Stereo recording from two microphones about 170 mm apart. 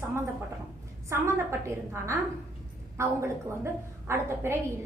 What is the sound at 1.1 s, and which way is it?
A woman's voice, 15° right (ahead or behind).